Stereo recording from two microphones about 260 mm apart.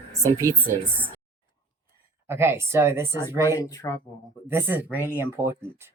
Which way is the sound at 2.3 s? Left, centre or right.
Centre.